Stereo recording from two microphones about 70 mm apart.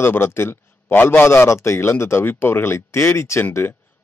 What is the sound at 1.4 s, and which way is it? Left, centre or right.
A man's voice, left.